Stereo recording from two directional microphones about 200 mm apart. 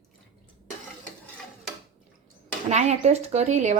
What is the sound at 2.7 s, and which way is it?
Speech, 35° right (ahead or behind).